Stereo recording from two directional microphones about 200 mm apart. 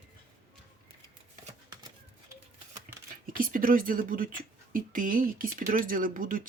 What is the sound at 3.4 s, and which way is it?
Speech, 45° right (ahead or behind).